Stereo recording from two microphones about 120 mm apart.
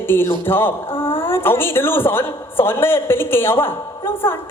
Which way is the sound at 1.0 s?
45° left (ahead or behind).